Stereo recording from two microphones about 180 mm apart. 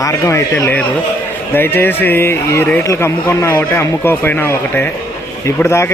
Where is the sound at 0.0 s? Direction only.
15° left (ahead or behind).